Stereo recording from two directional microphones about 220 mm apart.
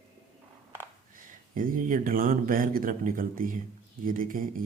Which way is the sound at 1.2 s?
40° right (ahead or behind).